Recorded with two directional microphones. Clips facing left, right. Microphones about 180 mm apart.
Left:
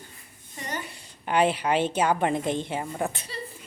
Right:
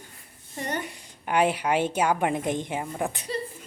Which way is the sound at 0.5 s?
55° right (ahead or behind).